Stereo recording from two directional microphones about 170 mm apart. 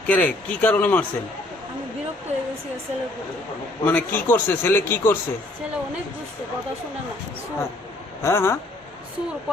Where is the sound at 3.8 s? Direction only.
10° left (ahead or behind).